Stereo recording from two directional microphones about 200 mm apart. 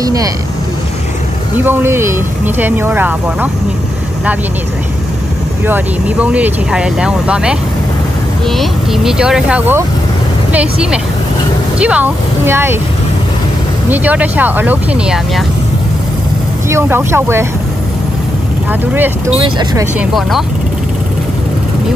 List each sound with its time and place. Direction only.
0.0 s speech: 20° right (ahead or behind)
1.6 s speech: 10° right (ahead or behind)
5.7 s speech: 5° right (ahead or behind)
13.8 s speech: 10° right (ahead or behind)
16.6 s speech: 10° right (ahead or behind)
18.7 s speech: 10° right (ahead or behind)
20.0 s speech: centre (ahead or behind)